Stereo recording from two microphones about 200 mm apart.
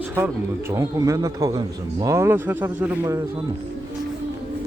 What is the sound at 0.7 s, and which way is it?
Speech, 15° right (ahead or behind).